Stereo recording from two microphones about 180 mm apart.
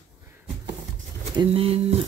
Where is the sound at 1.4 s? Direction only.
30° right (ahead or behind).